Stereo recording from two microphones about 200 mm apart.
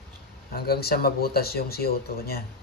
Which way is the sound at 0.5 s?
50° left (ahead or behind).